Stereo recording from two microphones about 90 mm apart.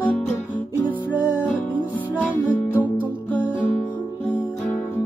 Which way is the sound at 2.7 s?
20° right (ahead or behind).